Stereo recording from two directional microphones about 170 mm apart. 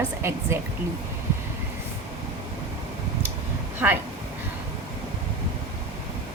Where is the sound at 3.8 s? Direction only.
10° right (ahead or behind).